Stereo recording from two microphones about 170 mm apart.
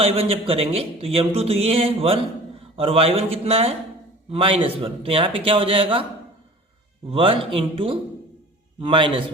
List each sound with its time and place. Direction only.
0.0 s speech: 35° right (ahead or behind)
7.1 s a man's voice: 35° right (ahead or behind)